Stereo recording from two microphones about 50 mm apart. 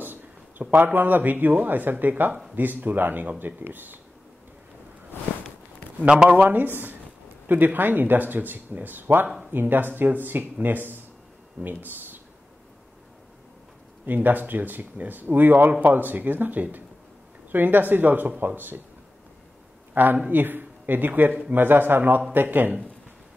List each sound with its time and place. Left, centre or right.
0.0 s a sound: right
1.6 s speech: right
6.2 s speech: right
14.0 s speech: right
19.9 s a man's voice: right